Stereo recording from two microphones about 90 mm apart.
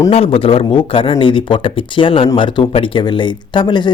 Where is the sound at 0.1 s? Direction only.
90° left.